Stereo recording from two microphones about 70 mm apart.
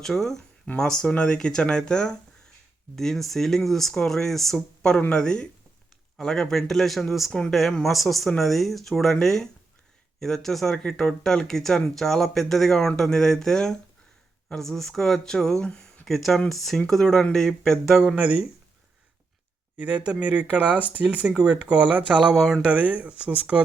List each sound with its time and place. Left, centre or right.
0.0 s speech: centre
17.8 s speech: centre
19.7 s speech: centre